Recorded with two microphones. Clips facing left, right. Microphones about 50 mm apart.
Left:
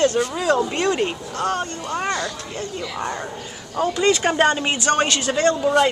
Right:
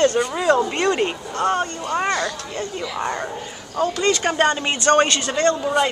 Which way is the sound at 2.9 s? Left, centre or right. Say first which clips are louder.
Right 3 dB; centre.